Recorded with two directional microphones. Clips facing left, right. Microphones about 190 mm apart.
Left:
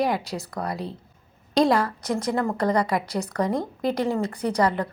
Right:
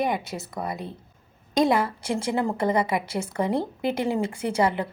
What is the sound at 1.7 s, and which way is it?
Speech, 25° right (ahead or behind).